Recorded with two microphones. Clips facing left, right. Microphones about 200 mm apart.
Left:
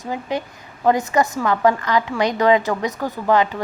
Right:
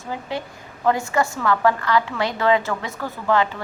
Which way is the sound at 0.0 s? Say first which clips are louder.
Left 4 dB; 15° left (ahead or behind).